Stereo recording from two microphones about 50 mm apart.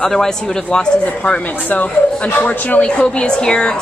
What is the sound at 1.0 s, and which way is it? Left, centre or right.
Speech, left.